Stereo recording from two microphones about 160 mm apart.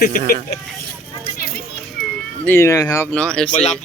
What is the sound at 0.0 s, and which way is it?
Speech, 70° left (ahead or behind).